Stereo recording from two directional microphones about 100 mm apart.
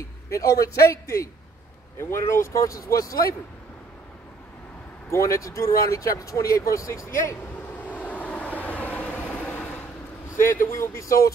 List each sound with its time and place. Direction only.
0.3 s speech: 30° left (ahead or behind)
5.1 s speech: 30° left (ahead or behind)
7.8 s vehicle: 15° left (ahead or behind)
10.4 s speech: 25° left (ahead or behind)